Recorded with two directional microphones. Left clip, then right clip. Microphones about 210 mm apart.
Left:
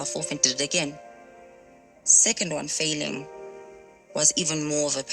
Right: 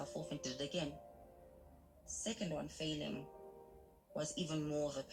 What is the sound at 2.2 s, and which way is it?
Speech, 30° left (ahead or behind).